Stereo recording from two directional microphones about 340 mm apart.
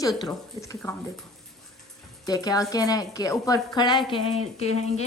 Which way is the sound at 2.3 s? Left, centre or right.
Centre.